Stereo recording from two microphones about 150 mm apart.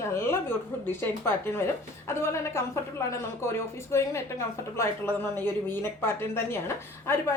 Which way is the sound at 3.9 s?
20° left (ahead or behind).